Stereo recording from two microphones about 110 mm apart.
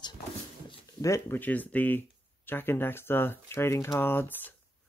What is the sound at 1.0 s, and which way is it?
Speech, 30° left (ahead or behind).